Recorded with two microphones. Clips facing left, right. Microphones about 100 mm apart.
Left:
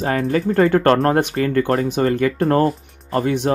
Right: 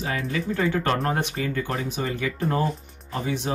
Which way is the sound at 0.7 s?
60° left (ahead or behind).